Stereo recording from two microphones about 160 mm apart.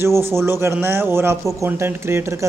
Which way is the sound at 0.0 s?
15° right (ahead or behind).